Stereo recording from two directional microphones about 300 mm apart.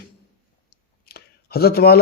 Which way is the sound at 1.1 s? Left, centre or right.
Left.